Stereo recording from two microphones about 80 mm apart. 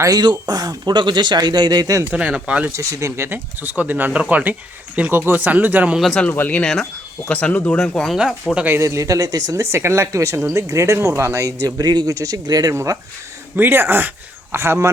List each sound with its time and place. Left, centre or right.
0.0 s speech: right
2.1 s speech: centre
2.7 s speech: right
3.2 s speech: right
6.0 s speech: centre
6.3 s speech: left
6.6 s speech: centre
7.8 s speech: centre
8.8 s speech: right
12.7 s speech: right
13.6 s speech: right